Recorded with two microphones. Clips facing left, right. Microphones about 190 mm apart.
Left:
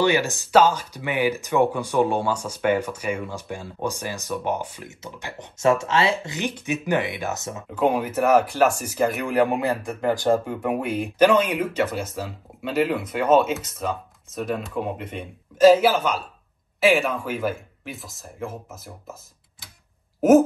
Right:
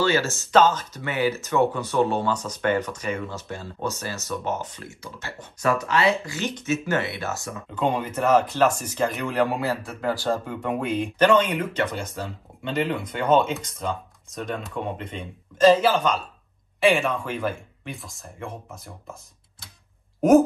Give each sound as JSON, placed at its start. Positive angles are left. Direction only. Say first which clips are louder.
{"t": 0.0, "sound": "speech", "louder": "left 2 dB", "side_deg": 15}
{"t": 7.7, "sound": "speech", "louder": "left 3 dB", "side_deg": 5}
{"t": 20.2, "sound": "speech", "louder": "left 1 dB", "side_deg": 0}